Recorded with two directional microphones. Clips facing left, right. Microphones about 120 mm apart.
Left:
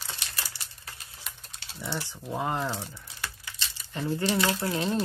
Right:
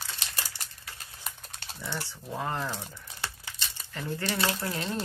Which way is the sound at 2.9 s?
25° right (ahead or behind).